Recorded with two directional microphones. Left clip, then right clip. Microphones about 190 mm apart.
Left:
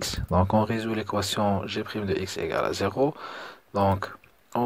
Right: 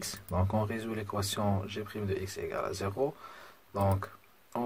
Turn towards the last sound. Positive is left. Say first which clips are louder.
# left 8 dB
turn(degrees=35)  # may be behind; listen again after turning